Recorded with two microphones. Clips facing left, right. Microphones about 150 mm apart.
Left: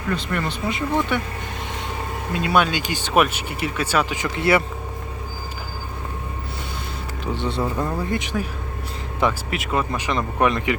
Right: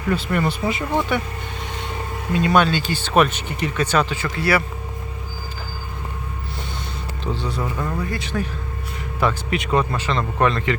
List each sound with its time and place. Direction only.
0.2 s speech: 5° right (ahead or behind)
2.3 s speech: 5° left (ahead or behind); by 4.6 s 20° left (ahead or behind)
7.3 s speech: 20° left (ahead or behind)
9.5 s speech: 5° left (ahead or behind)